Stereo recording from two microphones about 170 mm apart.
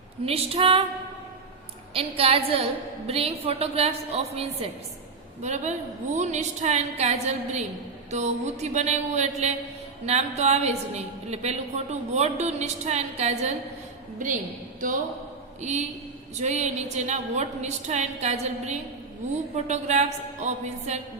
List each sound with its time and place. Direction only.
0.3 s a woman's voice: 35° right (ahead or behind)
1.9 s a woman's voice: 35° right (ahead or behind); by 14.4 s 50° right (ahead or behind)
15.6 s a woman's voice: 40° right (ahead or behind)